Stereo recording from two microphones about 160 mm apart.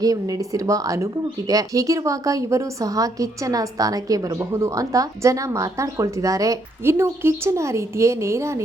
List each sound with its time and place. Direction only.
0.0 s speech: 20° right (ahead or behind)